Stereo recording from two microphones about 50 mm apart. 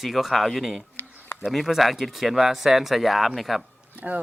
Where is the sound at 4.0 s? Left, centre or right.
Right.